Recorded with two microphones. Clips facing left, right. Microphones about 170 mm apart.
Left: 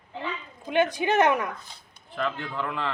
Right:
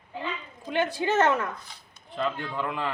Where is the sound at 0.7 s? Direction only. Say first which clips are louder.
Left 3 dB; 20° left (ahead or behind).